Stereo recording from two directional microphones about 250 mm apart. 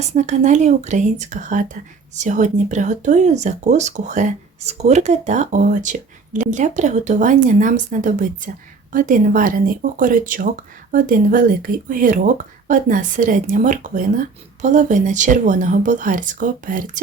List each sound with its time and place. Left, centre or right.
0.0 s speech: right